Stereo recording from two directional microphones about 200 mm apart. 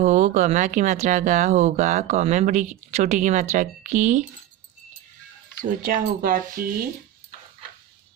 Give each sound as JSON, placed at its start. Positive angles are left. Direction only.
{"t": 0.0, "sound": "speech", "side_deg": -35}
{"t": 5.6, "sound": "speech", "side_deg": -45}